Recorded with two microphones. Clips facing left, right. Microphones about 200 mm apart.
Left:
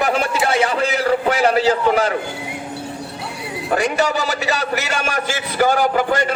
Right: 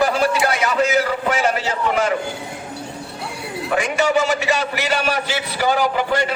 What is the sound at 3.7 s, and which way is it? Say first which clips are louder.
A man's voice: even; 40° left (ahead or behind).